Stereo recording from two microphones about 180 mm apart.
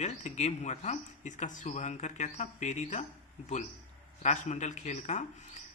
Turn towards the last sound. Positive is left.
turn(degrees=40)  # may be behind; listen again after turning